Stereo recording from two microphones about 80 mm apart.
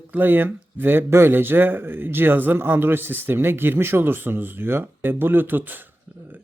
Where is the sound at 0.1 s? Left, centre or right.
Right.